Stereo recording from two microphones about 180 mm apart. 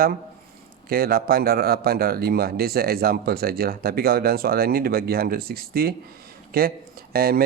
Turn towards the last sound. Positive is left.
turn(degrees=-55)  # may be behind; listen again after turning